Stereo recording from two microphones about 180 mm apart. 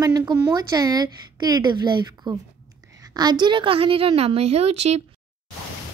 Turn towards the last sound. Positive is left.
turn(degrees=-35)  # may be behind; listen again after turning